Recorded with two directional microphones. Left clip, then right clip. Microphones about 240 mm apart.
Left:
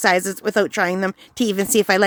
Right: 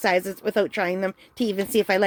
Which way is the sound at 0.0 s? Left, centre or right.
Left.